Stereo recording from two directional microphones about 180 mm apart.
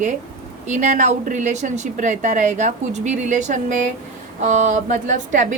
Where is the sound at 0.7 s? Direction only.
40° right (ahead or behind).